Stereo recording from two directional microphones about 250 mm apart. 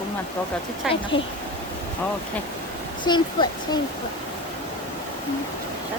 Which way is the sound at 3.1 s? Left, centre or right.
Centre.